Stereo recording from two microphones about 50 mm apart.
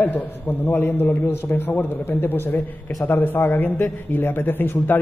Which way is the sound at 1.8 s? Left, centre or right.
Left.